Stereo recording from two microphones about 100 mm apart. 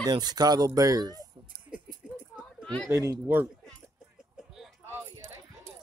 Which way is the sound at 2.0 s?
10° right (ahead or behind).